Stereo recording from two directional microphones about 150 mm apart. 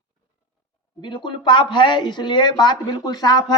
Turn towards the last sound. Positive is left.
turn(degrees=25)  # may be behind; listen again after turning